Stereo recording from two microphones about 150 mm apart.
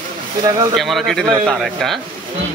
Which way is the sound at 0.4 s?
25° right (ahead or behind).